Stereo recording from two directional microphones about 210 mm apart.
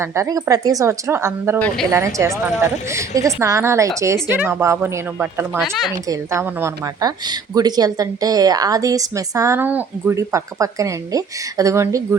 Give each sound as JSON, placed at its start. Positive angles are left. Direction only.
{"t": 0.0, "sound": "a woman's voice", "side_deg": -15}
{"t": 1.5, "sound": "a woman's voice", "side_deg": 5}
{"t": 1.9, "sound": "a woman's voice", "side_deg": -15}